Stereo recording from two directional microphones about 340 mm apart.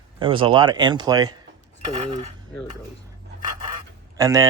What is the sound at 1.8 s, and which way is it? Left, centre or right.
Cutlery, centre.